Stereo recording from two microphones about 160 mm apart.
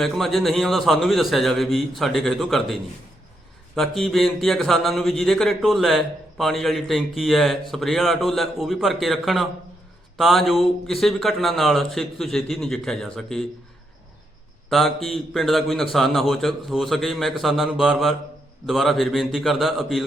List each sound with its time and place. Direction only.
0.0 s speech: centre (ahead or behind)
3.8 s speech: centre (ahead or behind)
14.7 s speech: centre (ahead or behind)